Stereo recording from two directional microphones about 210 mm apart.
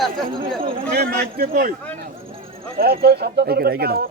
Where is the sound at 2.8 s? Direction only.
50° right (ahead or behind).